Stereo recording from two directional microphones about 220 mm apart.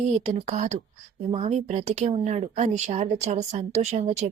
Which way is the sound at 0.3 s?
30° right (ahead or behind).